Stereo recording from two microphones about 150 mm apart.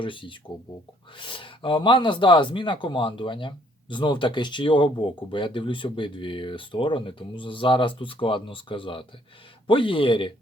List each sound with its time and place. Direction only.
0.0 s speech: 35° left (ahead or behind)